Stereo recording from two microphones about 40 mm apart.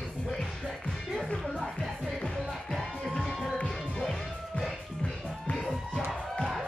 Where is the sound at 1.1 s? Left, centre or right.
Centre.